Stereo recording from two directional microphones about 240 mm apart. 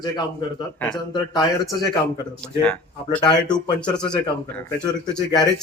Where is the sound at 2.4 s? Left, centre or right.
Centre.